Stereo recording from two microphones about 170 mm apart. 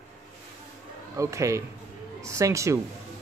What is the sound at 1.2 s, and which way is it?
Speech, 15° right (ahead or behind).